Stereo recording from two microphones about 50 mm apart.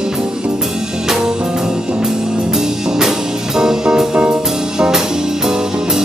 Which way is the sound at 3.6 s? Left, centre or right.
Centre.